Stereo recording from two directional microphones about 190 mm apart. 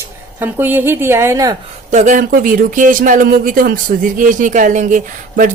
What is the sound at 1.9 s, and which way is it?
Speech, 40° right (ahead or behind).